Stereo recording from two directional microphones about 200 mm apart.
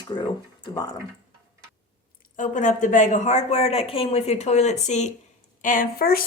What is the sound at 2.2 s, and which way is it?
A woman's voice, 40° left (ahead or behind).